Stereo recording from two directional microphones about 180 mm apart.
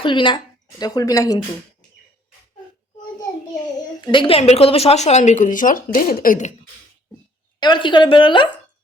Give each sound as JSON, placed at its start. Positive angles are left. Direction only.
{"t": 0.0, "sound": "a woman's voice", "side_deg": 25}
{"t": 4.0, "sound": "a woman's voice", "side_deg": 30}
{"t": 7.6, "sound": "speech", "side_deg": 25}